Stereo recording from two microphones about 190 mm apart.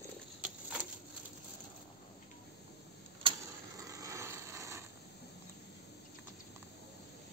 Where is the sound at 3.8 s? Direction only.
15° right (ahead or behind).